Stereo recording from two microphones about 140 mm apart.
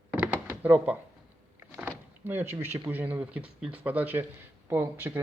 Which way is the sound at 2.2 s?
15° right (ahead or behind).